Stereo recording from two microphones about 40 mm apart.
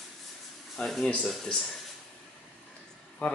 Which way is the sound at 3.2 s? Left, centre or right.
Left.